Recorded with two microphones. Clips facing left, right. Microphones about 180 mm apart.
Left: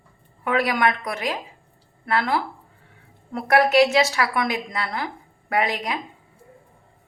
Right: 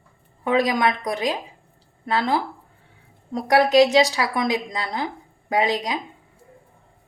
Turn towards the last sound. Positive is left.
turn(degrees=-20)  # may be behind; listen again after turning